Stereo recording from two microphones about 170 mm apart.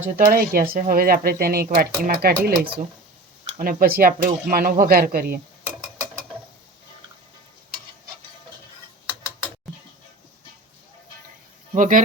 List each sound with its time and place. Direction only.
0.0 s speech: 55° right (ahead or behind)
11.7 s speech: 50° right (ahead or behind)